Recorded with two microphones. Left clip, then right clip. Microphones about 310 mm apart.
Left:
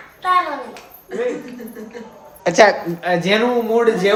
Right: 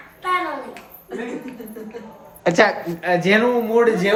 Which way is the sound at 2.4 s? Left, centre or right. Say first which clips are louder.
Left 4 dB; centre.